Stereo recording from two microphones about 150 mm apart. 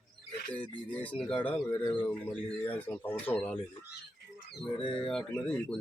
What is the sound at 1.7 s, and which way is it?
Speech, 30° left (ahead or behind).